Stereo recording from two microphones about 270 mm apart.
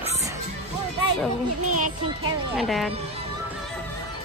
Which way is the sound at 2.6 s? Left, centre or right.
Centre.